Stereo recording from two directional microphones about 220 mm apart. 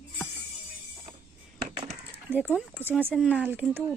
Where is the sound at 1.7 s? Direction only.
30° right (ahead or behind).